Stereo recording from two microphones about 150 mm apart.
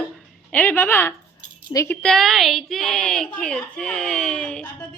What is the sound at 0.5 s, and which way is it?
Speech, 10° left (ahead or behind).